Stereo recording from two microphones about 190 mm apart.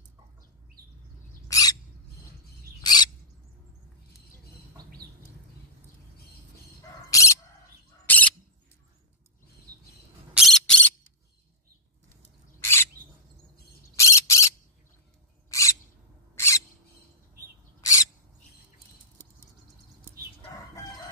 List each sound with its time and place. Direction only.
1.5 s owl: 20° left (ahead or behind)
2.8 s a sound: 20° left (ahead or behind)
7.1 s bird: 15° left (ahead or behind)
10.3 s a sound: centre (ahead or behind)
12.5 s rodents: 15° left (ahead or behind)
13.9 s bird: 15° left (ahead or behind)
15.5 s a sound: 15° left (ahead or behind)
16.3 s owl: 15° left (ahead or behind)
17.7 s bird: 15° left (ahead or behind)